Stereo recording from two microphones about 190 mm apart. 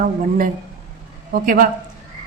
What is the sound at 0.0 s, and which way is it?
A woman's voice, 45° right (ahead or behind).